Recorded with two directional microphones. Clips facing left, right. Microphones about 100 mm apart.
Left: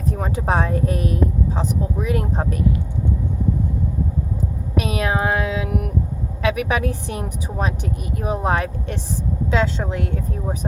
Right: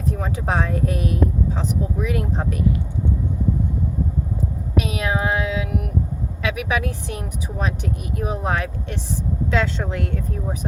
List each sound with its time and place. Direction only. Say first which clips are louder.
0.1 s speech: left 2 dB; 35° left (ahead or behind)
4.8 s a sound: left 2 dB; 45° left (ahead or behind)
6.4 s speech: left 3 dB; 40° left (ahead or behind)